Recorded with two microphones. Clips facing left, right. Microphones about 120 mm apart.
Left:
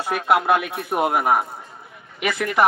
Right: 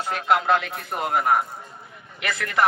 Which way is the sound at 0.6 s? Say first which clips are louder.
Left 6 dB; 60° left (ahead or behind).